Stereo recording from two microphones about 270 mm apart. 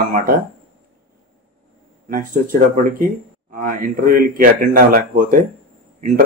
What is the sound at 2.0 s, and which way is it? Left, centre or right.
Speech, right.